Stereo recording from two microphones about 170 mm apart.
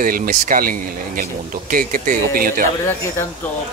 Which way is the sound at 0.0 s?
55° right (ahead or behind).